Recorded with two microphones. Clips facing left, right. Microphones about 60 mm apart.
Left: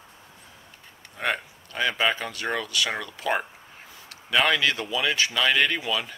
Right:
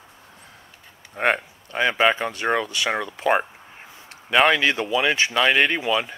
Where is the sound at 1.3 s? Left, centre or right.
Right.